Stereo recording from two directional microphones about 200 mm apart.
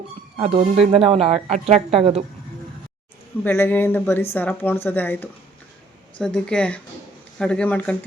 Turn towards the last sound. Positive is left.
turn(degrees=5)  # may be behind; listen again after turning